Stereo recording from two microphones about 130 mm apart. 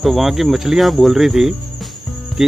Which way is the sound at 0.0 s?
Centre (ahead or behind).